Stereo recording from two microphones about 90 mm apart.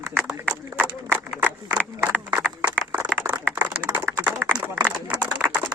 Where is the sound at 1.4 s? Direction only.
20° right (ahead or behind).